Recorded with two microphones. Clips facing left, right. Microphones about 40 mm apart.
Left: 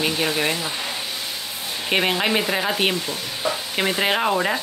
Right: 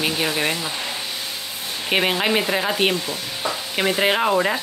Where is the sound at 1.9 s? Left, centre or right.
Centre.